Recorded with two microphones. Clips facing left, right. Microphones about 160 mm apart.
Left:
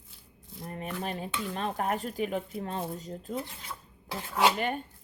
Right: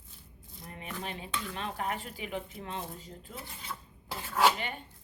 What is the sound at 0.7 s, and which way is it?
Dishes, 45° left (ahead or behind).